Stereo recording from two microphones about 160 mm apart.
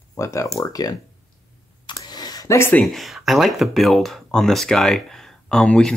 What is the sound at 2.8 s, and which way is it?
Speech, centre (ahead or behind).